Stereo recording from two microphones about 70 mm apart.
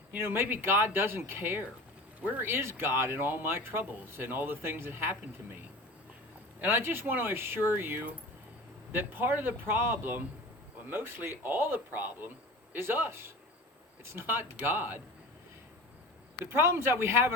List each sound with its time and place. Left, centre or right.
0.1 s speech: right
6.6 s speech: right
16.4 s speech: right